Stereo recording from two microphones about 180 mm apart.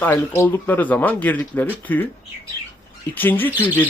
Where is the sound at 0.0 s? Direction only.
15° left (ahead or behind).